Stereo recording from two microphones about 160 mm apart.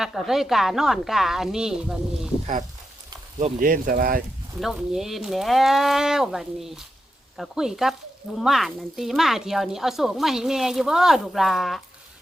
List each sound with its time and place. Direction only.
0.0 s speech: centre (ahead or behind)
3.6 s speech: 60° right (ahead or behind)
4.6 s speech: centre (ahead or behind)